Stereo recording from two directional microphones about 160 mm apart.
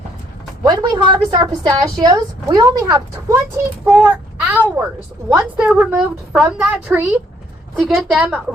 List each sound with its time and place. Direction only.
0.6 s a woman's voice: 25° right (ahead or behind)
3.8 s a woman's voice: 5° right (ahead or behind)